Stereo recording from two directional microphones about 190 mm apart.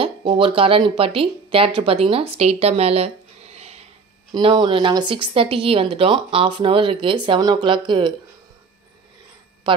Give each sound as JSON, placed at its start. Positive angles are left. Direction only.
{"t": 0.0, "sound": "speech", "side_deg": -30}